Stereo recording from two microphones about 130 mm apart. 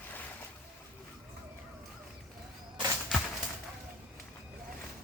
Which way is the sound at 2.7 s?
30° right (ahead or behind).